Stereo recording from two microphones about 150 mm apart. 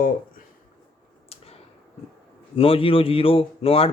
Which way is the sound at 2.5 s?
40° left (ahead or behind).